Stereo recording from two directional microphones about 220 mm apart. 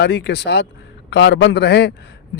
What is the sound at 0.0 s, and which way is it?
Speech, 50° left (ahead or behind).